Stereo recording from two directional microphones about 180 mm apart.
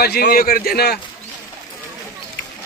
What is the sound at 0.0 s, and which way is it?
Speech, 60° left (ahead or behind).